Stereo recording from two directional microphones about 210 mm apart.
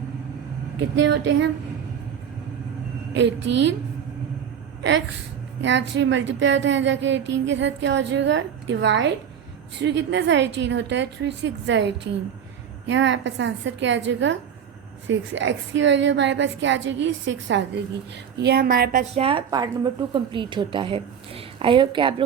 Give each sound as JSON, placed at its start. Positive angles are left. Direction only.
{"t": 0.8, "sound": "speech", "side_deg": -60}
{"t": 3.2, "sound": "speech", "side_deg": -60}
{"t": 4.8, "sound": "a sound", "side_deg": -60}
{"t": 5.6, "sound": "a woman's voice", "side_deg": -60}
{"t": 19.1, "sound": "a woman's voice", "side_deg": -25}